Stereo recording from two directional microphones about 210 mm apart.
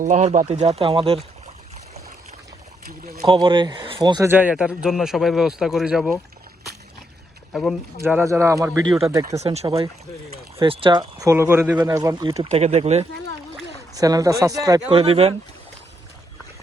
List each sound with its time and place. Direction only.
0.0 s speech: 35° right (ahead or behind)
3.2 s speech: 20° right (ahead or behind)
4.3 s a man's voice: 5° right (ahead or behind)
7.5 s speech: centre (ahead or behind)
8.0 s speech: 10° right (ahead or behind)
9.4 s speech: 30° right (ahead or behind)
12.5 s speech: 30° right (ahead or behind)
13.9 s speech: 15° right (ahead or behind)